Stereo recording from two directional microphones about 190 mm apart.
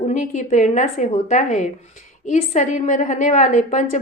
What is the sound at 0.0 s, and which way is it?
A woman's voice, 40° left (ahead or behind).